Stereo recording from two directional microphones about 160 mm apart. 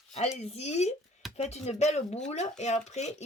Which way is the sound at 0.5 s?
45° left (ahead or behind).